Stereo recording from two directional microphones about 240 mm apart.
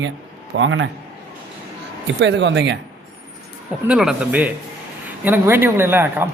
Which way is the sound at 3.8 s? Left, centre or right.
Centre.